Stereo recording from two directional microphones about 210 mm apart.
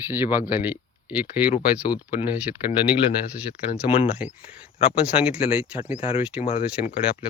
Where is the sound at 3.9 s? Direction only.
25° left (ahead or behind).